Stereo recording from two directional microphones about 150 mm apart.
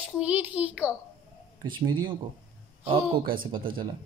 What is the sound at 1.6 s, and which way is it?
Speech, 30° right (ahead or behind).